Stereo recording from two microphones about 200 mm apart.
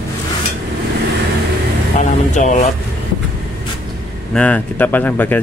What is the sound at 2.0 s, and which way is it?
Vehicle, 35° left (ahead or behind).